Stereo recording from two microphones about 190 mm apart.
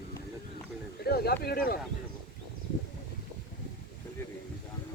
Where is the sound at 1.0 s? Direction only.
55° left (ahead or behind).